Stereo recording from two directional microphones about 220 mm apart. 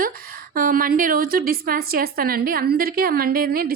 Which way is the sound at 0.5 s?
40° right (ahead or behind).